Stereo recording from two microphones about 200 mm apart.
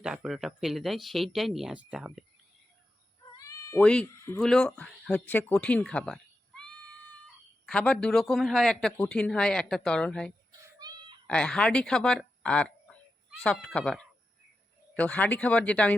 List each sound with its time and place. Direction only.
0.0 s speech: 5° right (ahead or behind)
3.3 s cat: 15° left (ahead or behind)
3.8 s speech: 10° left (ahead or behind)
10.8 s a sound: 20° right (ahead or behind)
11.3 s speech: 5° left (ahead or behind)